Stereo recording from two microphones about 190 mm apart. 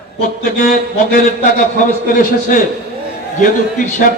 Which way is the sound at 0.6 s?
50° left (ahead or behind).